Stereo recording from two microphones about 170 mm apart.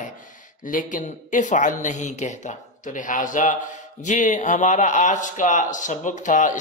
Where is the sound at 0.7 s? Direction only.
50° left (ahead or behind).